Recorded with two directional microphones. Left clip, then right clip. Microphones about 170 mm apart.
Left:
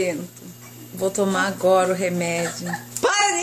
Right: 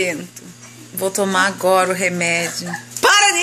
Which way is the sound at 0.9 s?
5° left (ahead or behind).